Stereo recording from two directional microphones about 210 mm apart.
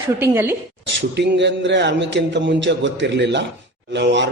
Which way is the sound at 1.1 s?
55° right (ahead or behind).